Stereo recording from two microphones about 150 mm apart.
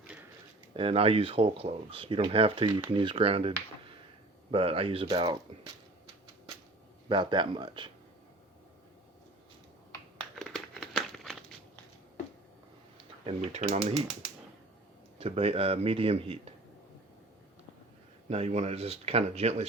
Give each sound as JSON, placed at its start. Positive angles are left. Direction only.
{"t": 0.8, "sound": "speech", "side_deg": -40}
{"t": 4.5, "sound": "speech", "side_deg": -40}
{"t": 5.0, "sound": "speech", "side_deg": -30}
{"t": 7.1, "sound": "speech", "side_deg": -30}
{"t": 10.3, "sound": "crumpling", "side_deg": 0}
{"t": 13.2, "sound": "speech", "side_deg": -45}
{"t": 15.2, "sound": "speech", "side_deg": -40}
{"t": 18.3, "sound": "speech", "side_deg": -45}